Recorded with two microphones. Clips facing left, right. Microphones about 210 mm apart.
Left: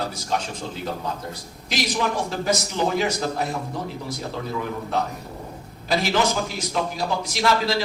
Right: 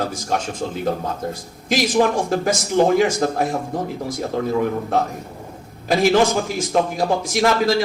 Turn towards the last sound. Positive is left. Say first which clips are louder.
# right 5 dB
turn(degrees=-50)  # may be behind; listen again after turning